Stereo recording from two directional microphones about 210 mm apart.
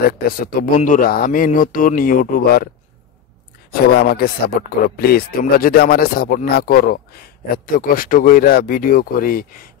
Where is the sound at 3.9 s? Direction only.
50° left (ahead or behind).